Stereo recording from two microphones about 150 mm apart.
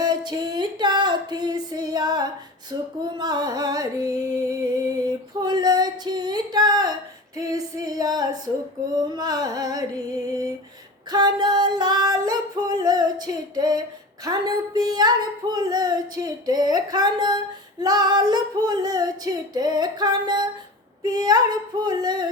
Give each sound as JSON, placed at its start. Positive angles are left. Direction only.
{"t": 0.3, "sound": "music", "side_deg": -30}
{"t": 3.0, "sound": "female singing", "side_deg": -25}
{"t": 7.8, "sound": "a sound", "side_deg": -25}
{"t": 8.9, "sound": "speech", "side_deg": -25}
{"t": 11.1, "sound": "yodeling", "side_deg": -25}
{"t": 14.3, "sound": "speech", "side_deg": -25}